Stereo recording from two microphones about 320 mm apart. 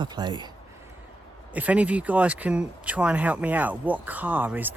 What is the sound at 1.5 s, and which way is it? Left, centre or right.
Speech, centre.